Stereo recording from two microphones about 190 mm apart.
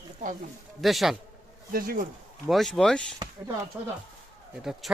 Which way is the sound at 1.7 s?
50° right (ahead or behind).